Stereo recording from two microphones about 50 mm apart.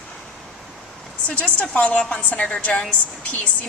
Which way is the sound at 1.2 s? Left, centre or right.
Left.